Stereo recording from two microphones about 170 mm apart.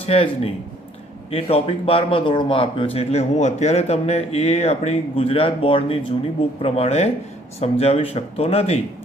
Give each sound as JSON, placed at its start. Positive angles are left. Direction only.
{"t": 0.0, "sound": "speech", "side_deg": 35}